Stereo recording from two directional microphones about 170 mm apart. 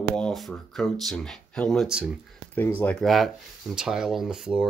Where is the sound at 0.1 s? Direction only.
Centre (ahead or behind).